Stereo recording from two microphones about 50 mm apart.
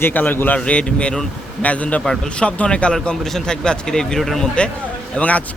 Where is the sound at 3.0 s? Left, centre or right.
Centre.